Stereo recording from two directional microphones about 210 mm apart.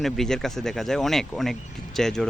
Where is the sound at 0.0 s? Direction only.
Centre (ahead or behind).